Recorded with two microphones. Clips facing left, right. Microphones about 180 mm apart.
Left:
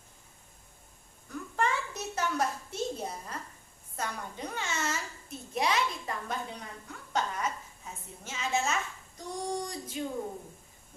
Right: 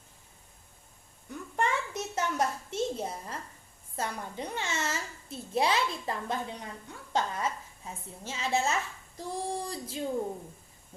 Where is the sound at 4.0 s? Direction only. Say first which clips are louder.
Right 2 dB; 25° right (ahead or behind).